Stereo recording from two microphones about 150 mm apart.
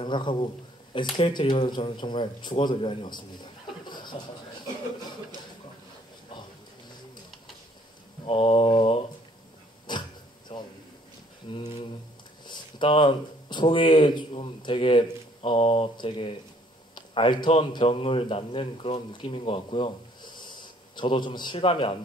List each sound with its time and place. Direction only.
0.0 s speech: 30° left (ahead or behind)
8.3 s speech: 40° left (ahead or behind)
10.5 s a sound: 40° left (ahead or behind)
11.5 s speech: 35° left (ahead or behind)